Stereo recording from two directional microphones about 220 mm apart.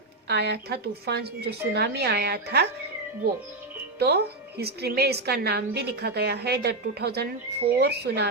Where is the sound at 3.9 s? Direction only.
45° right (ahead or behind).